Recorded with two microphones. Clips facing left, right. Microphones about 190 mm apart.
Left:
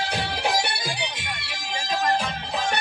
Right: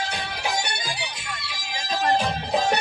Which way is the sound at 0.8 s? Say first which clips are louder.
Left 2 dB; 65° left (ahead or behind).